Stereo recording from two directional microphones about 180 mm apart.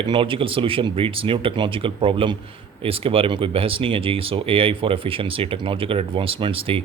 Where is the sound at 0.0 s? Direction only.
25° right (ahead or behind).